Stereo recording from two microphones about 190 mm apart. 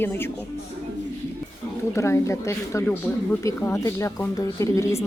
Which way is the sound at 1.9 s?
15° left (ahead or behind).